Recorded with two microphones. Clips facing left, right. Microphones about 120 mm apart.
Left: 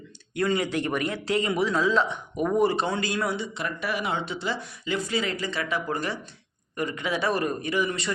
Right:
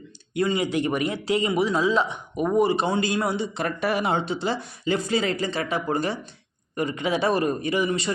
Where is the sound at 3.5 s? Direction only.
40° right (ahead or behind).